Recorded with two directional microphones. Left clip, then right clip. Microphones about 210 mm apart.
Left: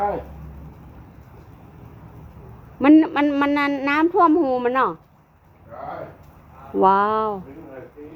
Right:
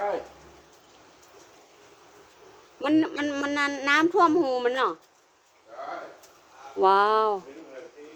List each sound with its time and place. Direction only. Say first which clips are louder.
2.8 s a woman's voice: left 10 dB; 10° left (ahead or behind)
6.7 s speech: left 3 dB; 15° right (ahead or behind)